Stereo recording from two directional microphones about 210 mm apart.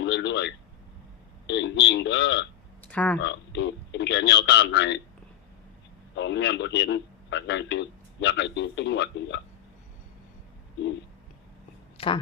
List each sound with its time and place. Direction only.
0.0 s a sound: 60° left (ahead or behind)
1.5 s a man's voice: 60° left (ahead or behind)
2.8 s speech: 5° left (ahead or behind)
3.2 s a man's voice: 60° left (ahead or behind)
6.1 s a man's voice: 55° left (ahead or behind)
11.9 s speech: 25° left (ahead or behind)